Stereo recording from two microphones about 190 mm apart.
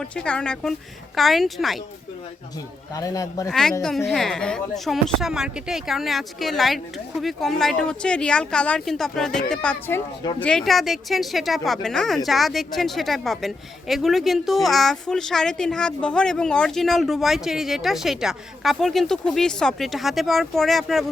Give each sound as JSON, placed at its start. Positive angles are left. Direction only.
{"t": 0.0, "sound": "speech", "side_deg": 5}
{"t": 2.9, "sound": "a man's voice", "side_deg": 20}
{"t": 3.5, "sound": "speech", "side_deg": 0}